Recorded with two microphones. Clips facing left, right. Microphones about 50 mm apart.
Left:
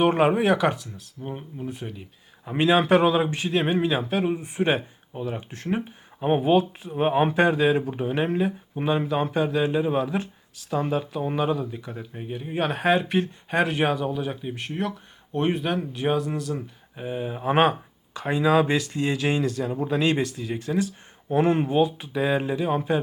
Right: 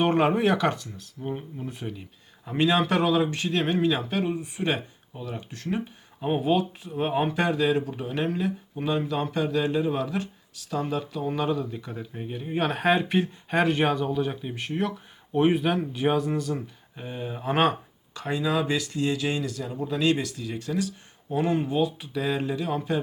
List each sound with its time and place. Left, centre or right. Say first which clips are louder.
0.0 s speech: left 2 dB; centre
2.5 s speech: left 4 dB; centre
21.2 s speech: left 4 dB; left